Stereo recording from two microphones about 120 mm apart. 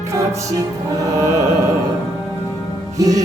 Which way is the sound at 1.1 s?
25° right (ahead or behind).